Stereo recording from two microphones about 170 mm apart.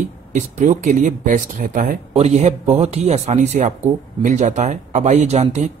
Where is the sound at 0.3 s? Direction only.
45° right (ahead or behind).